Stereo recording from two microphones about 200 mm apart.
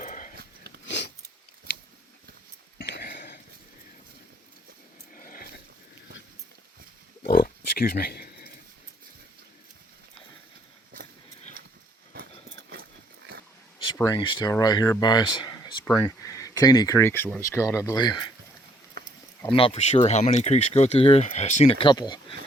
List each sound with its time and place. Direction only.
0.0 s wheeze: 40° left (ahead or behind)
2.7 s a sound: 50° left (ahead or behind)
5.1 s a sound: 45° left (ahead or behind)
7.2 s pig: 45° left (ahead or behind)
14.0 s speech: 20° left (ahead or behind)
19.5 s speech: 25° left (ahead or behind)